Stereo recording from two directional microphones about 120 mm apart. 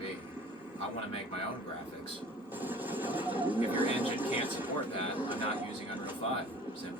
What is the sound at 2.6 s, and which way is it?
Speech, 15° right (ahead or behind).